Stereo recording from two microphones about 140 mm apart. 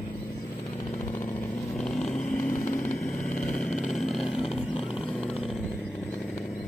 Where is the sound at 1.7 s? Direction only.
5° left (ahead or behind).